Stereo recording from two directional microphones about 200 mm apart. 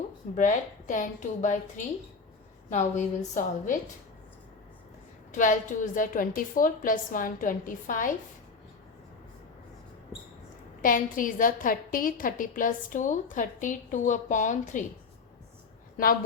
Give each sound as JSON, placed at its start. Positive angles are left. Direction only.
{"t": 0.3, "sound": "a woman's voice", "side_deg": 40}
{"t": 5.3, "sound": "a woman's voice", "side_deg": 40}
{"t": 10.8, "sound": "a woman's voice", "side_deg": 45}